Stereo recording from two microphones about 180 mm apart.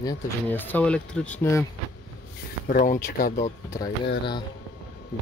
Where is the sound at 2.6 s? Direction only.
50° left (ahead or behind).